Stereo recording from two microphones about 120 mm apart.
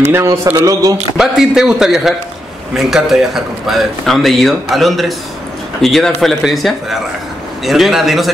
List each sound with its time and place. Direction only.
0.1 s a man's voice: 25° right (ahead or behind)
1.1 s speech: 5° right (ahead or behind)